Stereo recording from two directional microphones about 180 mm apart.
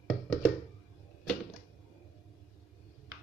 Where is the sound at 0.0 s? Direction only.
5° left (ahead or behind).